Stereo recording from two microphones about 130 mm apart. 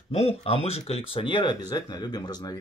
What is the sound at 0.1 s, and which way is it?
Speech, 50° left (ahead or behind).